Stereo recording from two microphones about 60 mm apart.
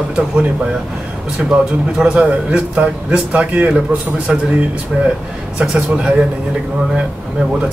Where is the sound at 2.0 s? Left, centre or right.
Centre.